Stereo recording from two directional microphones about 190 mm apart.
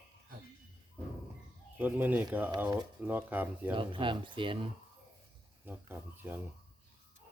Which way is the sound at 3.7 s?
25° right (ahead or behind).